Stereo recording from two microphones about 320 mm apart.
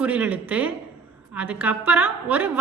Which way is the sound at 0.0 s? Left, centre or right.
Centre.